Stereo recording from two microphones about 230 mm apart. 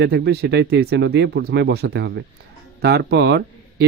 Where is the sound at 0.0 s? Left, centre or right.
Right.